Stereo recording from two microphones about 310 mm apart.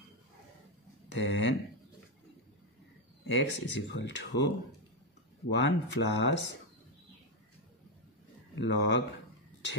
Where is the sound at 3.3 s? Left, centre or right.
Left.